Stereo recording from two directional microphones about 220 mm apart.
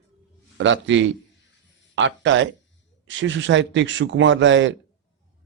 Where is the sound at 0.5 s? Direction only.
60° right (ahead or behind).